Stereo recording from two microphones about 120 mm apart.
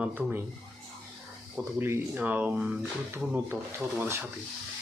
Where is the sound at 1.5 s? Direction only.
15° right (ahead or behind).